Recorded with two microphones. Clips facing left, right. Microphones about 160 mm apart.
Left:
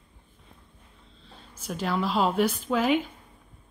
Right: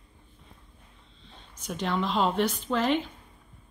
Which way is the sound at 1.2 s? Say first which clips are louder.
Left 1 dB; 5° left (ahead or behind).